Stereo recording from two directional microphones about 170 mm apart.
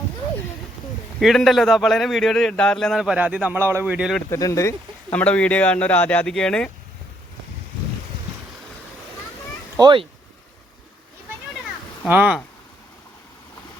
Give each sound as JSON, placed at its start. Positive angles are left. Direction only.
{"t": 1.2, "sound": "a man's voice", "side_deg": 0}
{"t": 4.3, "sound": "speech", "side_deg": 20}
{"t": 5.1, "sound": "speech", "side_deg": 10}
{"t": 9.7, "sound": "speech", "side_deg": -25}
{"t": 12.0, "sound": "speech", "side_deg": -10}